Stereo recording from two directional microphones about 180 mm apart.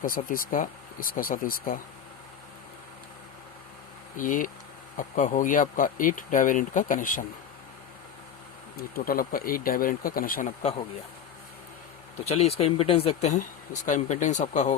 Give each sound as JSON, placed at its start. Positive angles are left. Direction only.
{"t": 0.0, "sound": "speech", "side_deg": 50}
{"t": 4.2, "sound": "speech", "side_deg": 50}
{"t": 8.7, "sound": "speech", "side_deg": 55}
{"t": 12.2, "sound": "speech", "side_deg": 35}